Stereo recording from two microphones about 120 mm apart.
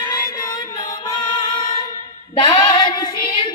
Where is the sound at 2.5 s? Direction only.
40° left (ahead or behind).